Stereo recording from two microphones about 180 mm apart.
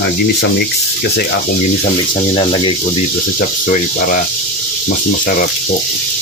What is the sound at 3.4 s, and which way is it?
Speech, 50° left (ahead or behind).